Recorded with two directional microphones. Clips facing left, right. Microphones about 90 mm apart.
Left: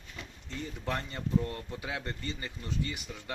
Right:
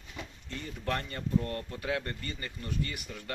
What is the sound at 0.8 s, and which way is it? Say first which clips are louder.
Speech: right 2 dB; 10° left (ahead or behind).